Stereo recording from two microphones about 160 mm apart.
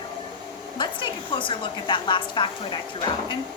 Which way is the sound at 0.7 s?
30° left (ahead or behind).